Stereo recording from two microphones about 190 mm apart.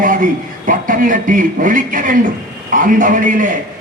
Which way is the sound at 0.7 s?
45° right (ahead or behind).